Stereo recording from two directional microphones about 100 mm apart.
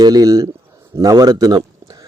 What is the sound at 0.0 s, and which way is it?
A man's voice, 40° right (ahead or behind).